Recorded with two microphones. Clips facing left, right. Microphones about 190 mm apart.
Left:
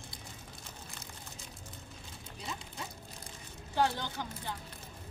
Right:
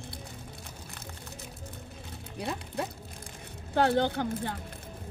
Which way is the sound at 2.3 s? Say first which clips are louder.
Right 10 dB; 60° right (ahead or behind).